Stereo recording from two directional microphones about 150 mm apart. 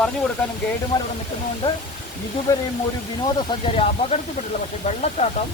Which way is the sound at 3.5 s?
40° left (ahead or behind).